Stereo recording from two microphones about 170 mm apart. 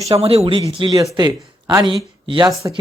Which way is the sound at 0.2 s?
35° right (ahead or behind).